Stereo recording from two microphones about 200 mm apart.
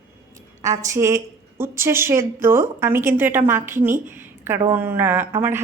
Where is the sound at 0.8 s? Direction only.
15° right (ahead or behind).